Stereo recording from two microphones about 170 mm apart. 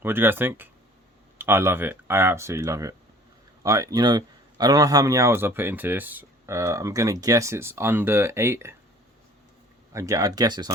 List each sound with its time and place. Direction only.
0.0 s speech: 15° right (ahead or behind)
9.9 s speech: 20° right (ahead or behind)